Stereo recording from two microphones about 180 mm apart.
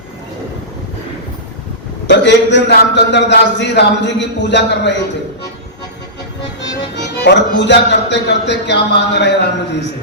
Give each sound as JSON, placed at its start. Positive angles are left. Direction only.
{"t": 2.0, "sound": "a man's voice", "side_deg": 75}
{"t": 6.9, "sound": "a man's voice", "side_deg": 70}